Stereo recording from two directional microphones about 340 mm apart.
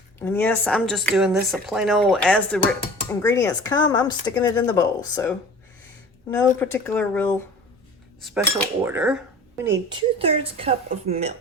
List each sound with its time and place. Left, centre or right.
0.2 s a woman's voice: centre
6.3 s a woman's voice: centre
9.6 s a woman's voice: centre